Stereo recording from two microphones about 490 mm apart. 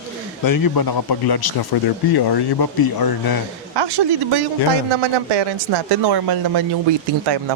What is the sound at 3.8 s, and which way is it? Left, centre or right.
Speech, right.